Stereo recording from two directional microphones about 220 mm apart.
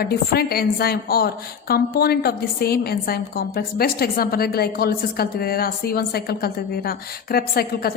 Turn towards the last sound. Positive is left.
turn(degrees=45)  # may be behind; listen again after turning